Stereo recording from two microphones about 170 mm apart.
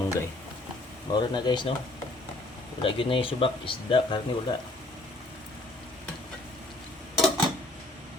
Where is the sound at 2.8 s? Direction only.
30° left (ahead or behind).